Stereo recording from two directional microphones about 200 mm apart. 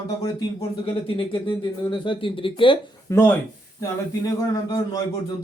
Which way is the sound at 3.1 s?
15° left (ahead or behind).